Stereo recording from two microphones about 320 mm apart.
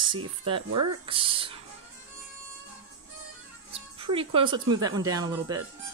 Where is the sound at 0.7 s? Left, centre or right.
Right.